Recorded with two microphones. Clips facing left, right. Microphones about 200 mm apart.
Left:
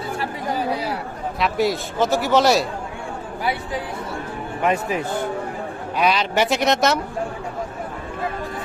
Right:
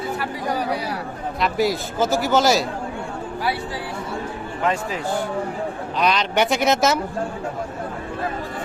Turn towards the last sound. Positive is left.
turn(degrees=0)  # may be behind; listen again after turning